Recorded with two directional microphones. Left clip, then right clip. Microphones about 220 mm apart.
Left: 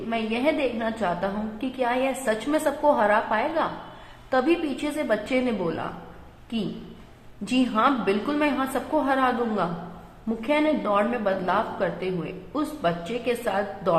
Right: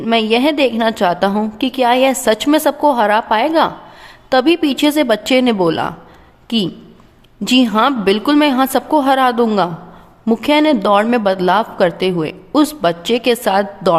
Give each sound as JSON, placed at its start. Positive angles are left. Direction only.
{"t": 0.1, "sound": "a woman's voice", "side_deg": -50}
{"t": 7.4, "sound": "a woman's voice", "side_deg": -50}